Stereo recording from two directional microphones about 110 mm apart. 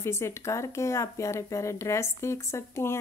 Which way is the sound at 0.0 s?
25° left (ahead or behind).